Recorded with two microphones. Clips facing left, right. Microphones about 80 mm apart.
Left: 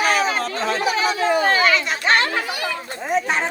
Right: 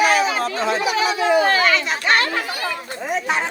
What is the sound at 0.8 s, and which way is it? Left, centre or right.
Chatter, left.